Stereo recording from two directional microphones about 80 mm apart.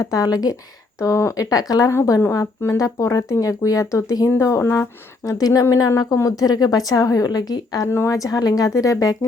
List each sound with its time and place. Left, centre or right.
0.0 s speech: left
0.9 s speech: left
1.9 s speech: left
5.4 s speech: left
7.9 s speech: left